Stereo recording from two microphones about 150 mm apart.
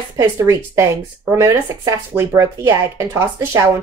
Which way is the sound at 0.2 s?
20° right (ahead or behind).